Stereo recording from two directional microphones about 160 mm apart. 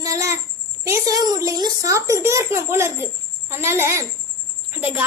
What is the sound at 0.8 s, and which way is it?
A child's voice, 20° right (ahead or behind).